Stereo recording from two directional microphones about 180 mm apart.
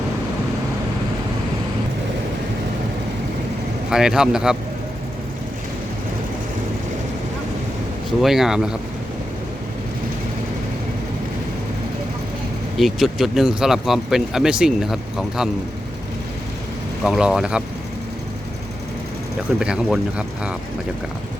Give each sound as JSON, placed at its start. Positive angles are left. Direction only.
{"t": 3.8, "sound": "speech", "side_deg": -5}
{"t": 8.2, "sound": "speech", "side_deg": 0}
{"t": 12.7, "sound": "speech", "side_deg": 0}
{"t": 17.0, "sound": "speech", "side_deg": -5}
{"t": 19.5, "sound": "speech", "side_deg": -5}